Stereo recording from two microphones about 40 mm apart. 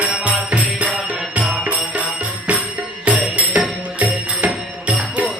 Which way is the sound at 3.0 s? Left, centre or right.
Right.